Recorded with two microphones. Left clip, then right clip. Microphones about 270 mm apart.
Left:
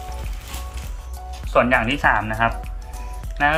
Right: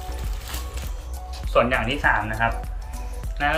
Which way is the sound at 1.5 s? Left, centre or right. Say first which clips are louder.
Left 3 dB; centre.